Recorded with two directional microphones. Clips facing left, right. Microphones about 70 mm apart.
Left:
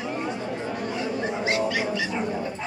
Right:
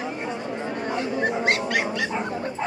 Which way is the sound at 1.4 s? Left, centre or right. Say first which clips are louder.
Right 1 dB; right.